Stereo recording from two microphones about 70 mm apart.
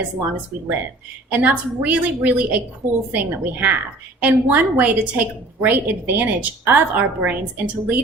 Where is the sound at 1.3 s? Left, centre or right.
Right.